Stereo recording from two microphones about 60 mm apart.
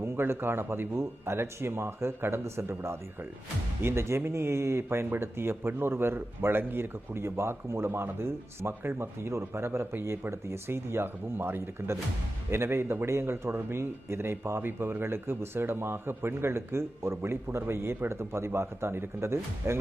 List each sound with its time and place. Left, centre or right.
0.0 s a man's voice: right